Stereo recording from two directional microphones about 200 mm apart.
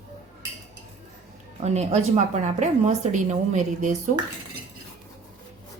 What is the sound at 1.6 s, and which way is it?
Speech, 35° right (ahead or behind).